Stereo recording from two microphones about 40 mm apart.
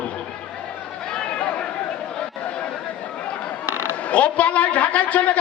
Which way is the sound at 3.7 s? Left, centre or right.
Right.